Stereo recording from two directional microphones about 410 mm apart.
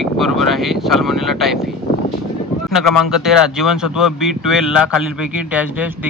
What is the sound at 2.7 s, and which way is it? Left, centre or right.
Speech, centre.